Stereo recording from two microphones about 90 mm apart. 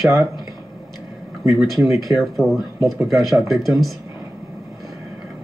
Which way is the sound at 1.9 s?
35° right (ahead or behind).